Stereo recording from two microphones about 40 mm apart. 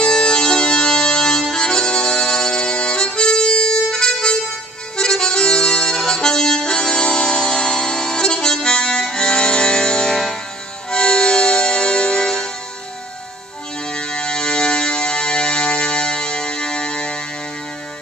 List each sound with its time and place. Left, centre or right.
0.0 s music: left
13.8 s music: left